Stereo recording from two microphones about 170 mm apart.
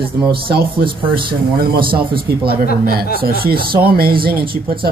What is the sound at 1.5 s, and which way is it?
Speech, 60° right (ahead or behind).